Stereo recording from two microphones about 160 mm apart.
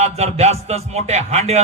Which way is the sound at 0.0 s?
40° right (ahead or behind).